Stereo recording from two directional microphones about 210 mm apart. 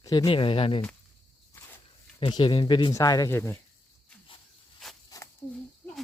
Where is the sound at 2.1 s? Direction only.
20° left (ahead or behind).